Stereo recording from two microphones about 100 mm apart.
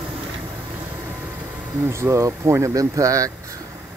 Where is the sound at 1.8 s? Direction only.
25° right (ahead or behind).